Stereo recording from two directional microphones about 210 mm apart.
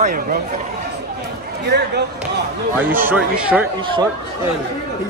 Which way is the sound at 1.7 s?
50° right (ahead or behind).